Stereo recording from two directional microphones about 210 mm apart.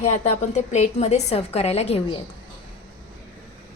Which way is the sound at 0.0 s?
35° left (ahead or behind).